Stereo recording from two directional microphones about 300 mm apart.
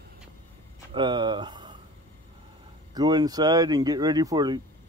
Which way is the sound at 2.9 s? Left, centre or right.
Centre.